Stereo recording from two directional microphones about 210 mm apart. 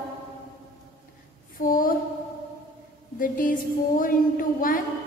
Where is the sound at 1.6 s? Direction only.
40° left (ahead or behind).